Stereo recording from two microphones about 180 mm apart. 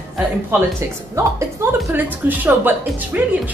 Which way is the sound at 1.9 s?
10° right (ahead or behind).